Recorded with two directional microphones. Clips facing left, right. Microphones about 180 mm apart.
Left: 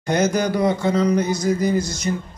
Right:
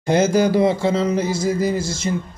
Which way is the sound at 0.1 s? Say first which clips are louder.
Right 3 dB; 25° right (ahead or behind).